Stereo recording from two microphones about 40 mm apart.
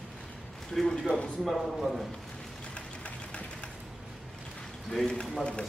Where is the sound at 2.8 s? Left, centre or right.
Left.